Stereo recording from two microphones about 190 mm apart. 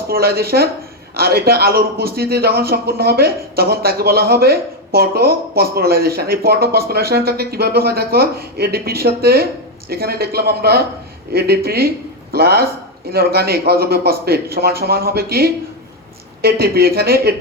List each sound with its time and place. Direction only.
0.1 s a man's voice: 55° right (ahead or behind)